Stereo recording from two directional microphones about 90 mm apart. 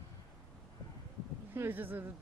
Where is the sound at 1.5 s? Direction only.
20° right (ahead or behind).